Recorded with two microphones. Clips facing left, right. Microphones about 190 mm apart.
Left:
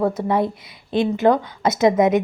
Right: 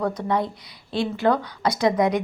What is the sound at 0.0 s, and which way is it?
A woman's voice, 25° left (ahead or behind).